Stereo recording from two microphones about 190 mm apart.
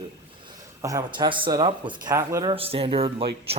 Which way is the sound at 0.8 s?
15° right (ahead or behind).